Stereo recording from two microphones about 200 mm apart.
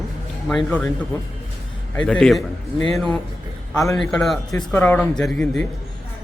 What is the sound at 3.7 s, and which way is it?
Speech, 15° left (ahead or behind).